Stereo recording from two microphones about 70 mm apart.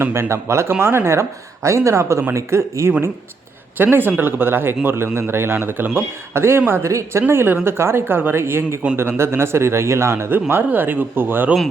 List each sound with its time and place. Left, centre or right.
0.0 s a man's voice: right
3.8 s a man's voice: right